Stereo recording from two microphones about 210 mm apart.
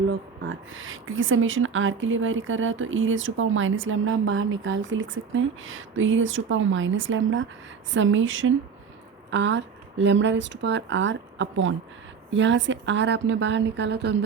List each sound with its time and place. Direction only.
0.4 s speech: 70° right (ahead or behind); by 14.2 s 55° right (ahead or behind)